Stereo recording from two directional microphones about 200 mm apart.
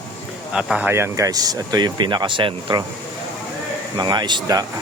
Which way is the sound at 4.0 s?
20° right (ahead or behind).